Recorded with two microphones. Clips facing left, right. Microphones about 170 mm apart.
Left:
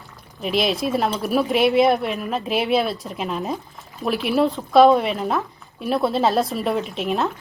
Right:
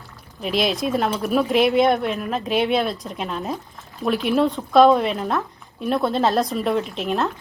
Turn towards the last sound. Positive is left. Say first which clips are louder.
# even
turn(degrees=0)  # may be behind; listen again after turning